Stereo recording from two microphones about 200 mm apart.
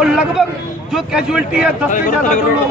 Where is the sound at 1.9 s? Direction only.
40° left (ahead or behind).